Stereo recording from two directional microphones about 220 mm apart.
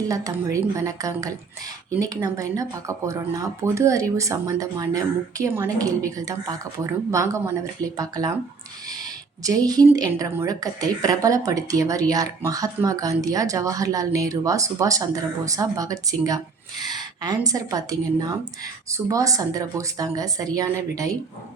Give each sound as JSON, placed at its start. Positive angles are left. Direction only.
{"t": 0.1, "sound": "a woman's voice", "side_deg": -15}
{"t": 9.6, "sound": "a woman's voice", "side_deg": -15}